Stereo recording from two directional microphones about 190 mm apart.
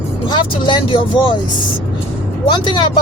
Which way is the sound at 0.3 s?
25° left (ahead or behind).